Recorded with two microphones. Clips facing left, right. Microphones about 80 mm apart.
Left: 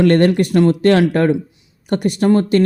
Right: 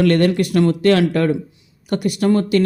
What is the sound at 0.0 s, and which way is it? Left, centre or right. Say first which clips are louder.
Speech: left 3 dB; left.